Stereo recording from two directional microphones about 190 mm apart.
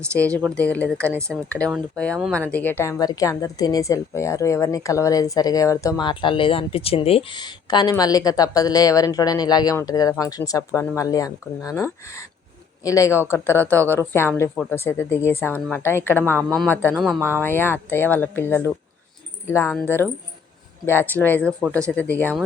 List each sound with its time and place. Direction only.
0.3 s a woman's voice: 5° left (ahead or behind)
16.9 s speech: 5° right (ahead or behind)
17.4 s a woman's voice: 10° left (ahead or behind)